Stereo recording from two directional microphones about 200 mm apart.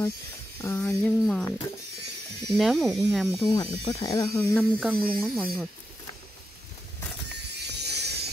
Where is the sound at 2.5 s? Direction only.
Centre (ahead or behind).